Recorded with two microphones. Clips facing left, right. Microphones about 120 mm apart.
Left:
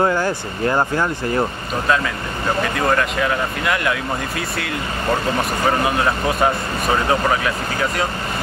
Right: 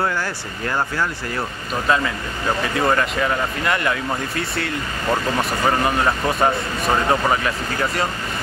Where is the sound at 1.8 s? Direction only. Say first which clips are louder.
Even; centre (ahead or behind).